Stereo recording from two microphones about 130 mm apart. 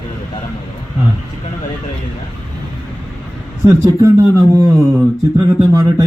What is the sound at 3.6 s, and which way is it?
Speech, 25° right (ahead or behind).